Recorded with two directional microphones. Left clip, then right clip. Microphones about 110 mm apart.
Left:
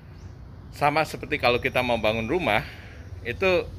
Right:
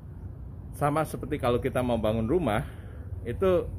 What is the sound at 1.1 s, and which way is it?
Speech, 30° right (ahead or behind).